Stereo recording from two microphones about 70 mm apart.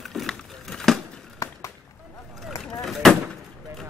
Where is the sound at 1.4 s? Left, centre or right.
Left.